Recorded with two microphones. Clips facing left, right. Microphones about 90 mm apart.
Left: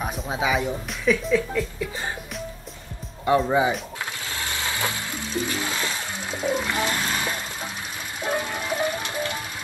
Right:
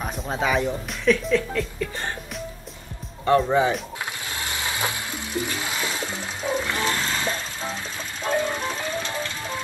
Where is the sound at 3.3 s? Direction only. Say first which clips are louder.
Right 1 dB; 10° left (ahead or behind).